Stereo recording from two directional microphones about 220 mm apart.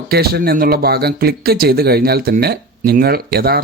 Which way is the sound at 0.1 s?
45° right (ahead or behind).